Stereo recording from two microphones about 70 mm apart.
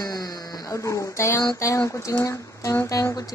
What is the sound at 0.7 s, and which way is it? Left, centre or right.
Speech, left.